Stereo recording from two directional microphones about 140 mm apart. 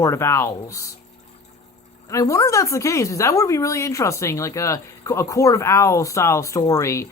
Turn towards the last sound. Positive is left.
turn(degrees=20)  # may be behind; listen again after turning